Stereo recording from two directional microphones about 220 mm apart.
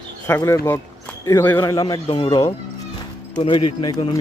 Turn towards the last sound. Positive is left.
turn(degrees=20)  # may be behind; listen again after turning